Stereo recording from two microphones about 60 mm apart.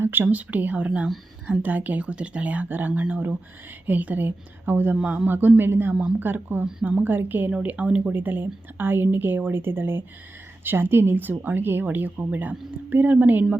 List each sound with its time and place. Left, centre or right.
0.0 s speech: right
4.9 s speech: right
8.1 s speech: right